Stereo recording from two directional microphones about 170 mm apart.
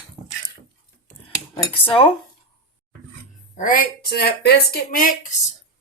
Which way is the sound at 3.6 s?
55° left (ahead or behind).